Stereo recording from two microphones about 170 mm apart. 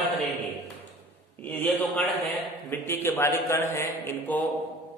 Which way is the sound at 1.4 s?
10° left (ahead or behind).